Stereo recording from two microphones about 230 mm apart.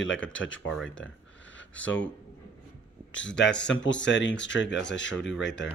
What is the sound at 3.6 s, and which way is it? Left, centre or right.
Speech, left.